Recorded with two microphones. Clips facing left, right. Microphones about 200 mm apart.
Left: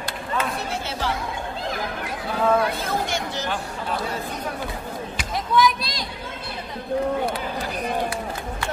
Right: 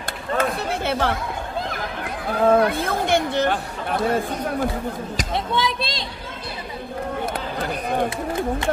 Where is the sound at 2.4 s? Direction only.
55° right (ahead or behind).